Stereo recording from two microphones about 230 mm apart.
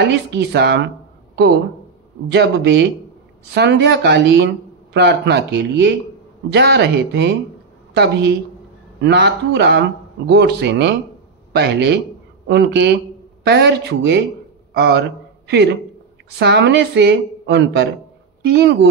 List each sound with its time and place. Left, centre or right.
0.1 s a woman's voice: right